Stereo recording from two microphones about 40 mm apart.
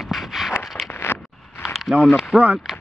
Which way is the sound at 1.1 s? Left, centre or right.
Left.